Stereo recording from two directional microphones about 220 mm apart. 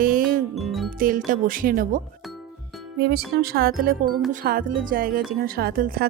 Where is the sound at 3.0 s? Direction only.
45° right (ahead or behind).